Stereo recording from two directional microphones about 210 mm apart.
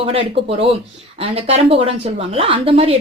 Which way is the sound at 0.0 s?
25° right (ahead or behind).